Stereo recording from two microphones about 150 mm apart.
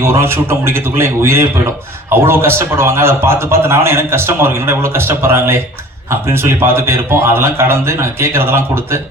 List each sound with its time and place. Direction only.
0.0 s a man's voice: 15° right (ahead or behind)